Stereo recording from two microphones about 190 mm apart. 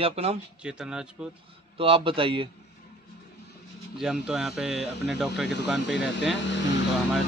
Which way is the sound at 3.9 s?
Centre (ahead or behind).